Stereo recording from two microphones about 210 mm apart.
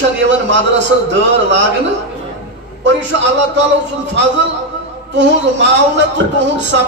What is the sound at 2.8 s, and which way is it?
Speech, 55° right (ahead or behind).